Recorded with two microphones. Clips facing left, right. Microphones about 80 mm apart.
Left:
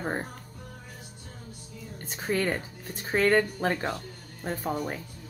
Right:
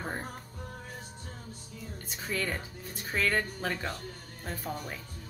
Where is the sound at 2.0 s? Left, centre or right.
Left.